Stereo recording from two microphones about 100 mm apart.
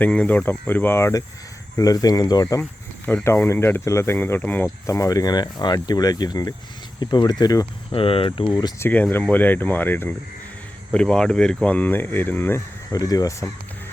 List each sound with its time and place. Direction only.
0.0 s speech: 15° left (ahead or behind)
1.7 s speech: 40° left (ahead or behind)
3.2 s speech: 25° left (ahead or behind)
4.6 s speech: 35° left (ahead or behind)
7.9 s speech: 65° left (ahead or behind)
8.8 s speech: 20° left (ahead or behind)
10.9 s speech: 10° left (ahead or behind)
12.9 s speech: 40° left (ahead or behind)